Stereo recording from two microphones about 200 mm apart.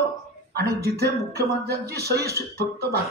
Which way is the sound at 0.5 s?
55° right (ahead or behind).